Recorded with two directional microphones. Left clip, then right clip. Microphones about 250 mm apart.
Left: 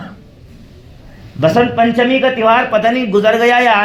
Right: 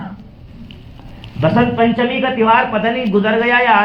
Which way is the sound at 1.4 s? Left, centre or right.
Left.